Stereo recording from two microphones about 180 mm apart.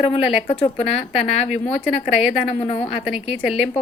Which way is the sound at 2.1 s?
5° right (ahead or behind).